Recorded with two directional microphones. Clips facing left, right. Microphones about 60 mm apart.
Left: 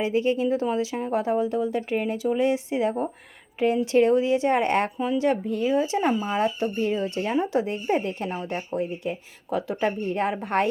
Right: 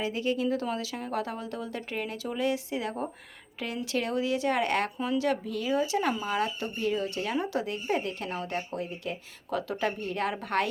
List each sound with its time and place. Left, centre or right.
0.0 s speech: left